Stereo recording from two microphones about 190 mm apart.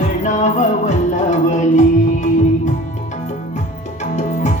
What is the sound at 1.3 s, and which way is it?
Music, 40° left (ahead or behind).